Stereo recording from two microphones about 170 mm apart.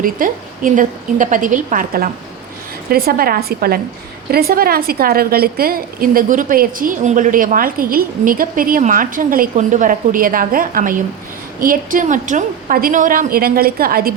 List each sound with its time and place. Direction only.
0.0 s a woman's voice: 55° right (ahead or behind)